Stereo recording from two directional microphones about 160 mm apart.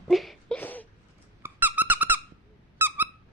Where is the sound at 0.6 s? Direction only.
10° left (ahead or behind).